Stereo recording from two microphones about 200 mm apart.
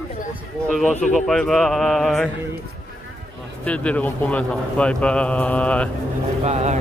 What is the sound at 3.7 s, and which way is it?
Speech, 5° left (ahead or behind).